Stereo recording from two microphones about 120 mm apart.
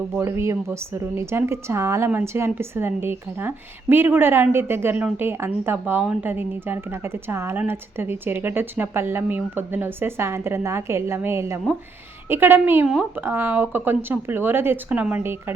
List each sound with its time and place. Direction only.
0.2 s speech: 25° right (ahead or behind)